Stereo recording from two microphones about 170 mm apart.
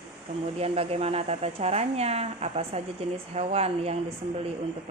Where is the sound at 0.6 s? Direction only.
35° right (ahead or behind).